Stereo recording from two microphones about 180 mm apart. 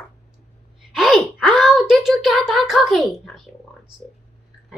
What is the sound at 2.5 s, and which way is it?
Speech, centre (ahead or behind).